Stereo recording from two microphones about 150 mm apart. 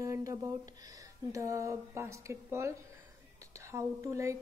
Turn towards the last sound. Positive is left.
turn(degrees=-20)  # may be behind; listen again after turning